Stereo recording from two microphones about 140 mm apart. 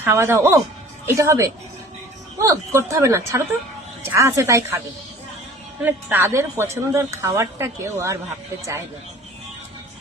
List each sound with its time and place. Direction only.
0.0 s speech: 15° right (ahead or behind)
5.8 s speech: 15° right (ahead or behind)